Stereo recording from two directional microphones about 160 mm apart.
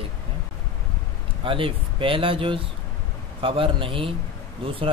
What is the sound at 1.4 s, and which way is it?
Speech, 35° right (ahead or behind).